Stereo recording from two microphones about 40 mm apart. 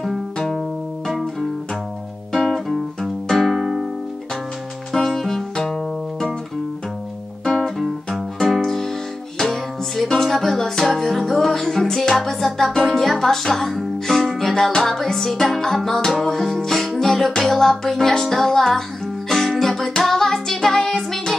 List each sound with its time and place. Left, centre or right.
0.6 s music: centre
2.3 s music: centre
4.9 s music: centre
7.6 s music: centre
8.5 s music: centre